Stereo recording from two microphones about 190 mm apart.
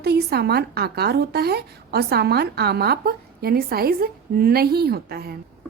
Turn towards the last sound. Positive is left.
turn(degrees=-55)  # may be behind; listen again after turning